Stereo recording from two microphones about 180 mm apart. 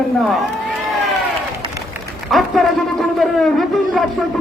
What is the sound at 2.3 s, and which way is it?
A man's voice, centre (ahead or behind).